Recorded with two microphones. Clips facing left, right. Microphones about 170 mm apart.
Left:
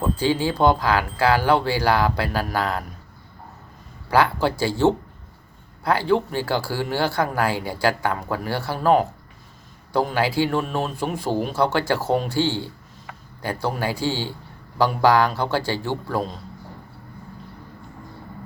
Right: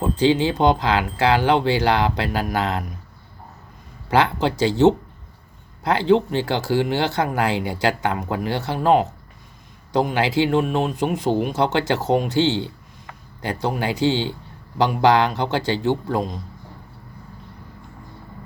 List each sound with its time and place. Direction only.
0.0 s a man's voice: 20° right (ahead or behind)
4.1 s a man's voice: 20° right (ahead or behind)